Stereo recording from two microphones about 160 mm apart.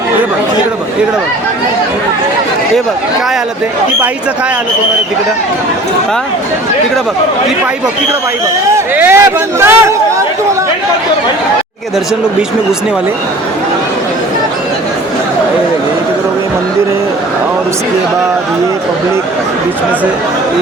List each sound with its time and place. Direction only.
8.7 s a man's voice: 15° right (ahead or behind)